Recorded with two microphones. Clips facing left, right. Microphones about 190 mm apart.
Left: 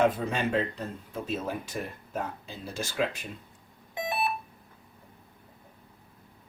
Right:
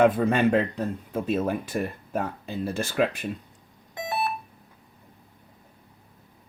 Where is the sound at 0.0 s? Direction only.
55° right (ahead or behind).